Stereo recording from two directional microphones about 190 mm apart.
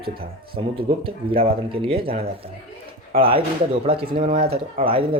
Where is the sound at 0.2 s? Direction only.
30° right (ahead or behind).